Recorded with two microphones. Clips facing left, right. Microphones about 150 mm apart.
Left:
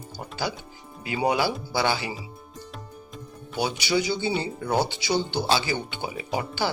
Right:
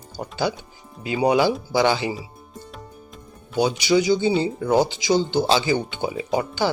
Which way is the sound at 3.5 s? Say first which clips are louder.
Right 6 dB; 15° right (ahead or behind).